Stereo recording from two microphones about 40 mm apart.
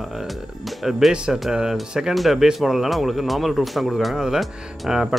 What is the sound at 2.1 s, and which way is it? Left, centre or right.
Speech, centre.